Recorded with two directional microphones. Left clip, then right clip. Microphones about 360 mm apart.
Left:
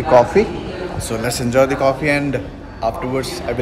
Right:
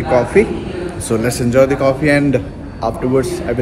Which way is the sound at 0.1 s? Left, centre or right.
Centre.